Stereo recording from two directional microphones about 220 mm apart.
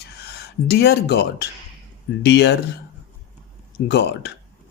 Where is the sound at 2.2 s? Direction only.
50° left (ahead or behind).